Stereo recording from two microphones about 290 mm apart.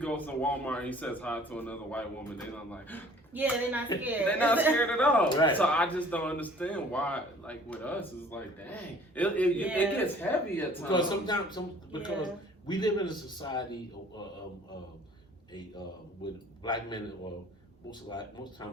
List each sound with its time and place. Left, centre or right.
0.0 s a man's voice: centre
5.3 s speech: centre
5.5 s a man's voice: centre
16.6 s speech: centre
18.1 s speech: centre